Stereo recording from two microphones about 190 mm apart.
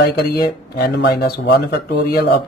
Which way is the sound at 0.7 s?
55° left (ahead or behind).